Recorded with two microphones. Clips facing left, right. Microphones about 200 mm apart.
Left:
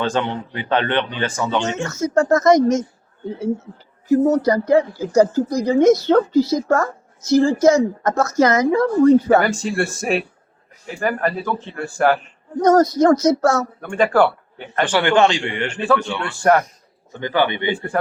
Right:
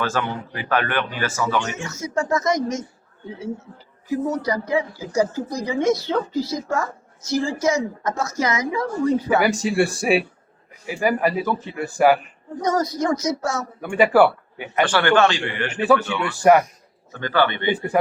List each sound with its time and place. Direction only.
0.0 s speech: 25° left (ahead or behind)
1.7 s a woman's voice: 50° left (ahead or behind)
4.1 s a woman's voice: 45° left (ahead or behind)
9.6 s a man's voice: 5° right (ahead or behind)
12.6 s a woman's voice: 50° left (ahead or behind)
13.8 s a man's voice: 5° right (ahead or behind)
14.9 s speech: 15° left (ahead or behind)
15.7 s a man's voice: 5° right (ahead or behind)
17.1 s speech: 15° left (ahead or behind)
17.7 s speech: 20° right (ahead or behind)